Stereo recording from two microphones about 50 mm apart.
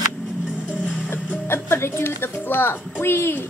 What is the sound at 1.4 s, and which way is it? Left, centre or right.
Music, left.